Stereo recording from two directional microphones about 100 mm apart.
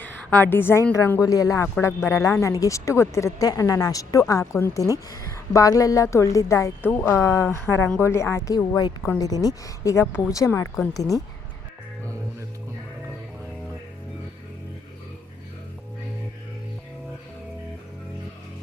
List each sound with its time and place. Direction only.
0.0 s a woman's voice: 20° left (ahead or behind)
1.2 s a woman's voice: 35° left (ahead or behind)
8.5 s a woman's voice: 45° left (ahead or behind)